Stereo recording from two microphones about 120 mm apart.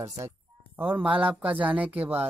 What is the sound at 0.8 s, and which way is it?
Speech, 15° right (ahead or behind).